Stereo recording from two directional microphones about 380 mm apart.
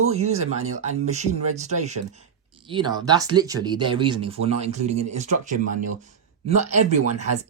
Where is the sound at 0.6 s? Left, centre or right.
Right.